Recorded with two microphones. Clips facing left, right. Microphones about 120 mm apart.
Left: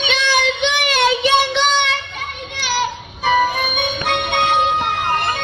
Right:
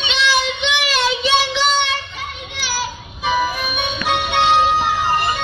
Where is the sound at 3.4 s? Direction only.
55° left (ahead or behind).